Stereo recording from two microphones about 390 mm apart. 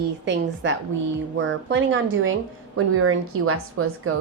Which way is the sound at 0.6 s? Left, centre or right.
Right.